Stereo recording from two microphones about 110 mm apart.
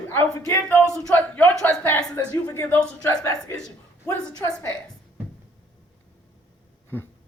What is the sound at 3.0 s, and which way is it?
A woman's voice, 30° left (ahead or behind).